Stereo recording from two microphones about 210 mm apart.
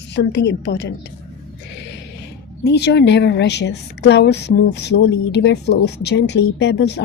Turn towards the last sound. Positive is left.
turn(degrees=55)  # may be behind; listen again after turning